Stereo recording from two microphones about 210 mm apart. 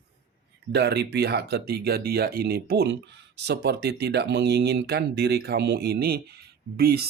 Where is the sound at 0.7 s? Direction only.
50° right (ahead or behind).